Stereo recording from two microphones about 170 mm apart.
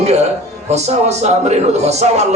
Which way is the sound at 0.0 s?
40° right (ahead or behind).